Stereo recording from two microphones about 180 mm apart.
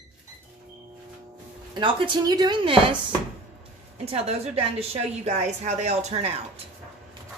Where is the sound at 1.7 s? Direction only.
25° right (ahead or behind).